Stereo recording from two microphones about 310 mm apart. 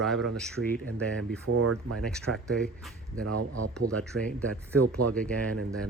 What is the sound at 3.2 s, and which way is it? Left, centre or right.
Speech, right.